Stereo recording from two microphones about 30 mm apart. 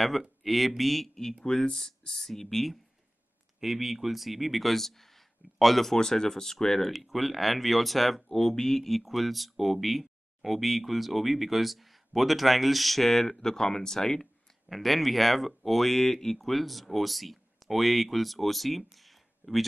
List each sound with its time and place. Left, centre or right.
0.4 s speech: centre
1.4 s speech: left
2.1 s speech: centre
3.5 s speech: centre
5.9 s speech: left
6.9 s speech: centre
8.3 s speech: centre
8.9 s speech: centre
14.7 s speech: centre
16.3 s speech: centre